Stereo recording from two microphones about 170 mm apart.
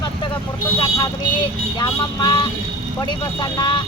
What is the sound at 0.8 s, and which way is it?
Speech, 25° left (ahead or behind).